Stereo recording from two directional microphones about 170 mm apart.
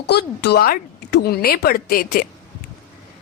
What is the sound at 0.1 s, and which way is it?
A woman's voice, 70° left (ahead or behind).